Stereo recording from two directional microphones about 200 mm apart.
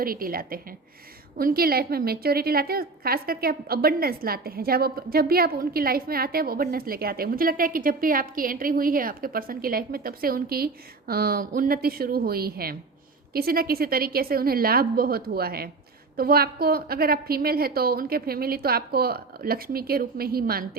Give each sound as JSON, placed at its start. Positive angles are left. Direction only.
{"t": 0.0, "sound": "a woman's voice", "side_deg": -45}